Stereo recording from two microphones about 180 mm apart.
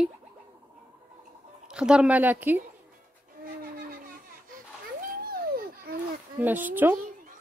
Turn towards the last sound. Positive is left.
turn(degrees=-10)  # may be behind; listen again after turning